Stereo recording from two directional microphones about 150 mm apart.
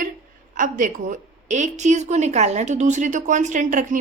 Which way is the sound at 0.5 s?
60° right (ahead or behind).